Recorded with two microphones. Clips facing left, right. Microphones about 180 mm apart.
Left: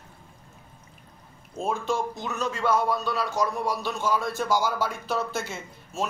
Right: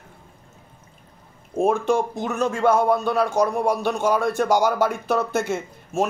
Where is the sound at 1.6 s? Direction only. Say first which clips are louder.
Right 8 dB; 55° right (ahead or behind).